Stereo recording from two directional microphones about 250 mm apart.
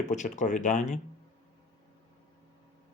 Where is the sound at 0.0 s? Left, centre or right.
Left.